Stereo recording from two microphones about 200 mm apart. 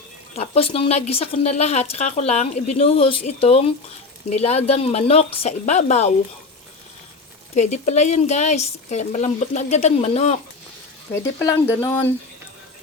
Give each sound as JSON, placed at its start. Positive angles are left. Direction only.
{"t": 0.3, "sound": "speech", "side_deg": 30}
{"t": 7.5, "sound": "speech", "side_deg": 35}
{"t": 11.1, "sound": "speech", "side_deg": 15}